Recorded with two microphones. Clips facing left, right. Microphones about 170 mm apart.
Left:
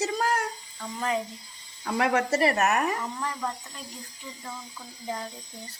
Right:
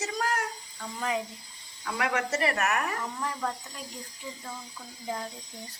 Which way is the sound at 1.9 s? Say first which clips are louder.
Left 5 dB; 30° left (ahead or behind).